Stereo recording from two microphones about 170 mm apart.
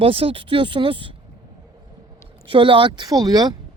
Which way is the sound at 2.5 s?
30° right (ahead or behind).